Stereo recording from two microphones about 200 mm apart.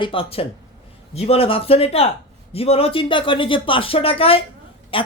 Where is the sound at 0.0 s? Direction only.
25° left (ahead or behind).